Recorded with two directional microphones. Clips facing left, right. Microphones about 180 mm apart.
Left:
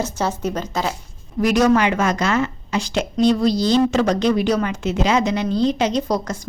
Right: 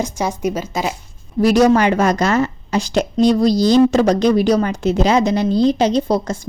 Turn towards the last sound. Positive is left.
turn(degrees=-30)  # may be behind; listen again after turning